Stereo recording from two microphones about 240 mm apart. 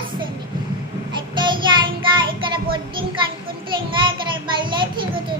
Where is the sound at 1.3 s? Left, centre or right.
Centre.